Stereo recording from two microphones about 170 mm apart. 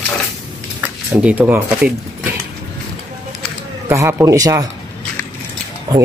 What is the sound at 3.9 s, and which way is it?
Speech, 15° right (ahead or behind).